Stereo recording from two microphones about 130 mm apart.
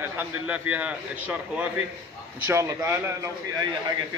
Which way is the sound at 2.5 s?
20° right (ahead or behind).